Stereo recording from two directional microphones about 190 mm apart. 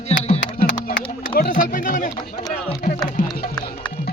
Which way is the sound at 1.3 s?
45° left (ahead or behind).